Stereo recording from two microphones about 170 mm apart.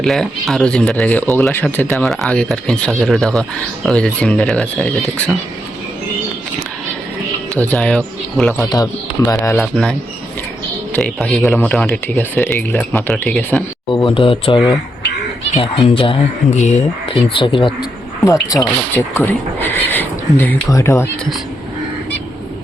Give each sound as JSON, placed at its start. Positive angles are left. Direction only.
{"t": 0.0, "sound": "speech", "side_deg": 0}
{"t": 7.5, "sound": "speech", "side_deg": 5}
{"t": 8.5, "sound": "speech", "side_deg": 20}
{"t": 9.6, "sound": "speech", "side_deg": 5}
{"t": 10.9, "sound": "speech", "side_deg": 5}
{"t": 11.4, "sound": "speech", "side_deg": 15}
{"t": 11.7, "sound": "speech", "side_deg": 5}
{"t": 13.9, "sound": "speech", "side_deg": 30}
{"t": 18.5, "sound": "speech", "side_deg": 10}